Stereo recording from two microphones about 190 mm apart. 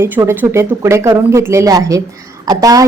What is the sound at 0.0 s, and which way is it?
A woman's voice, 10° right (ahead or behind).